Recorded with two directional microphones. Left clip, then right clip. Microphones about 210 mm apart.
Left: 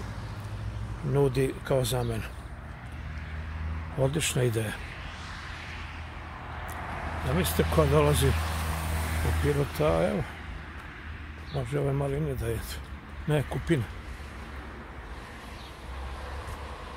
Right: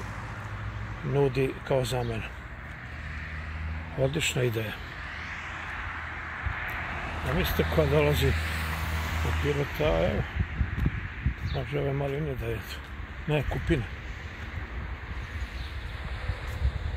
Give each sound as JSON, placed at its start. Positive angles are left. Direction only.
{"t": 1.1, "sound": "speech", "side_deg": 10}
{"t": 4.0, "sound": "speech", "side_deg": 10}
{"t": 6.7, "sound": "vehicle", "side_deg": -10}
{"t": 7.2, "sound": "speech", "side_deg": 10}
{"t": 8.4, "sound": "vehicle", "side_deg": 30}
{"t": 9.6, "sound": "speech", "side_deg": 15}
{"t": 11.5, "sound": "speech", "side_deg": 10}